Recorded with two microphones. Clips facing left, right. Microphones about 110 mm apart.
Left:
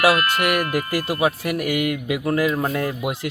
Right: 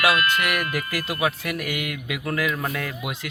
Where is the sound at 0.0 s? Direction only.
40° left (ahead or behind).